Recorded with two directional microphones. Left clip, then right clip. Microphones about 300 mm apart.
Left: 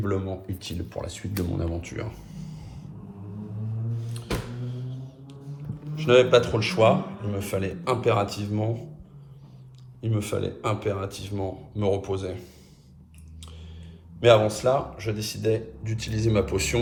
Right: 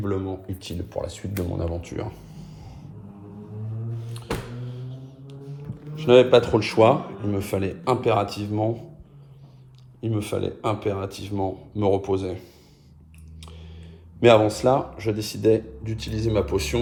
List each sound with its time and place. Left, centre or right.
0.0 s speech: centre
4.6 s music: centre
6.0 s a man's voice: centre
10.0 s a man's voice: centre
14.2 s a man's voice: right